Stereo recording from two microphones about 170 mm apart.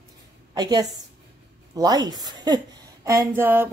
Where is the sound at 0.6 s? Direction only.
25° right (ahead or behind).